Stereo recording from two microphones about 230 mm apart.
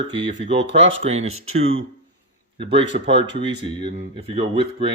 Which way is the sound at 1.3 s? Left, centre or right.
Right.